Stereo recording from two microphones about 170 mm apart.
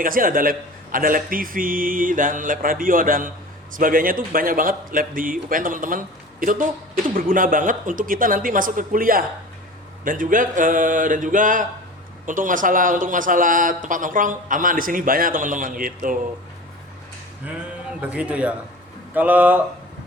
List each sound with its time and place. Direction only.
0.0 s a man's voice: 55° right (ahead or behind)
18.0 s speech: 5° right (ahead or behind)